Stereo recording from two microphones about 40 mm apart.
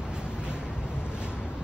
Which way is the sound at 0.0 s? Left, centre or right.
Right.